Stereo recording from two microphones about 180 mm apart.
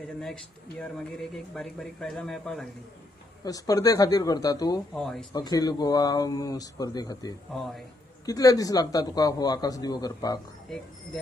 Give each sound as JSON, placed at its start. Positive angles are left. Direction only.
{"t": 0.2, "sound": "speech", "side_deg": 0}
{"t": 3.4, "sound": "a man's voice", "side_deg": 20}
{"t": 4.9, "sound": "speech", "side_deg": 0}
{"t": 5.3, "sound": "a man's voice", "side_deg": 20}
{"t": 7.5, "sound": "speech", "side_deg": 0}
{"t": 8.3, "sound": "a man's voice", "side_deg": 20}